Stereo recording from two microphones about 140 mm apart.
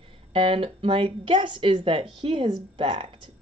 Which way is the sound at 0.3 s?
40° right (ahead or behind).